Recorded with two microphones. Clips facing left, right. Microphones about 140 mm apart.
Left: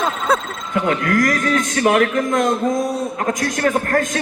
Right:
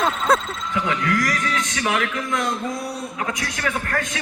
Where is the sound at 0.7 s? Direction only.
50° left (ahead or behind).